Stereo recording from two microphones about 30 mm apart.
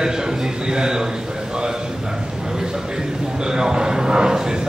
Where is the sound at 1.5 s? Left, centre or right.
Right.